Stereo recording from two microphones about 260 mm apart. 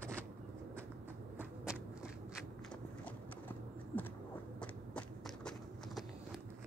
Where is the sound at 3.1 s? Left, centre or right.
Centre.